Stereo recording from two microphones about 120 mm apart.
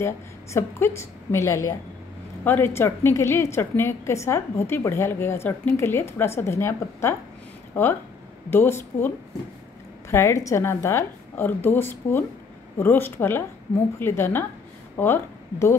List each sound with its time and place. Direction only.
0.0 s a woman's voice: 25° left (ahead or behind)